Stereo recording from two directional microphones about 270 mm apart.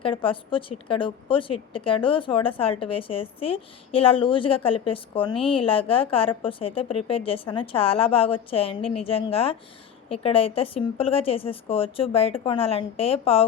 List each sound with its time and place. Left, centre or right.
0.0 s a woman's voice: centre